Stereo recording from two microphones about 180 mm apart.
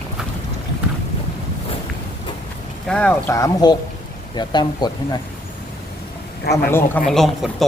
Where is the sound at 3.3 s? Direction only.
20° left (ahead or behind).